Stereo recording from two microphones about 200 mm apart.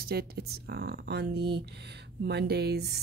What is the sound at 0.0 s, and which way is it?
Speech, 50° right (ahead or behind).